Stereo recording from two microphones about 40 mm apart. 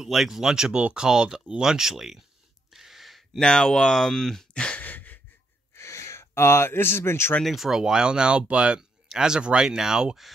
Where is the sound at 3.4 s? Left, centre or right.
Left.